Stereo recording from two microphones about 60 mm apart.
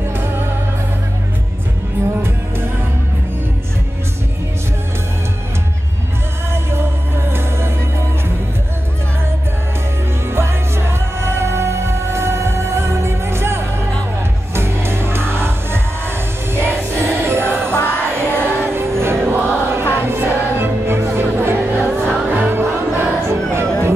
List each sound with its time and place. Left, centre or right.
0.1 s music: right
6.5 s music: right
10.3 s music: right